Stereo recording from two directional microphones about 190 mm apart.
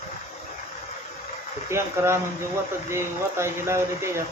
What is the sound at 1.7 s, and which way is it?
Speech, 15° right (ahead or behind).